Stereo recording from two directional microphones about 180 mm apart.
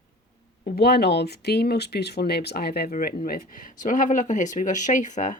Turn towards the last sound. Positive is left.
turn(degrees=45)  # may be behind; listen again after turning